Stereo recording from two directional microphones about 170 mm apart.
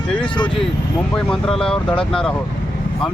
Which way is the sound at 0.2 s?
30° left (ahead or behind).